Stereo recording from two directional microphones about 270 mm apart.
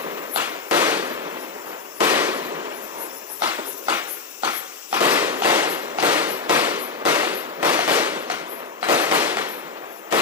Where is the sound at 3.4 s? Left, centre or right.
Centre.